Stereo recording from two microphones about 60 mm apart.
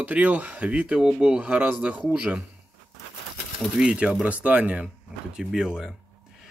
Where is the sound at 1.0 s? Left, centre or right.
Centre.